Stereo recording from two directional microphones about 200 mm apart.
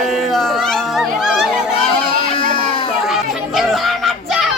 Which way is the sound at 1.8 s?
25° left (ahead or behind).